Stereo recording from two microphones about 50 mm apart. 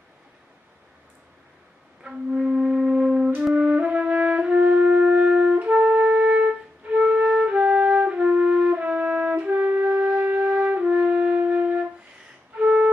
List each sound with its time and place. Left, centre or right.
2.0 s music: centre
3.5 s brass instrument: right
5.6 s music: right
9.6 s music: right
10.1 s wind instrument: right
10.8 s music: centre
12.5 s busy signal: right